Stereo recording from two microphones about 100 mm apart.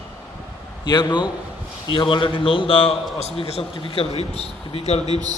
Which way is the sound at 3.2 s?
90° left.